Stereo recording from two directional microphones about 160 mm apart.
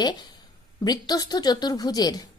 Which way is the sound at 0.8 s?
25° left (ahead or behind).